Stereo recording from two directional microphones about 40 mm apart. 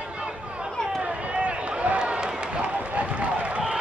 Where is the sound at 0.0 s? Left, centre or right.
Right.